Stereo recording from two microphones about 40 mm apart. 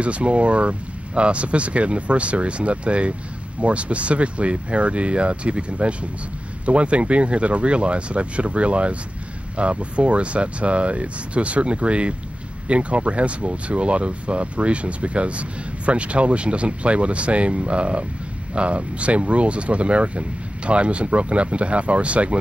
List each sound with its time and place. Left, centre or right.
0.0 s speech: right